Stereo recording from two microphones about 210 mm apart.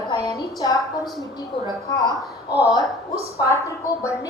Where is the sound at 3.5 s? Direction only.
15° left (ahead or behind).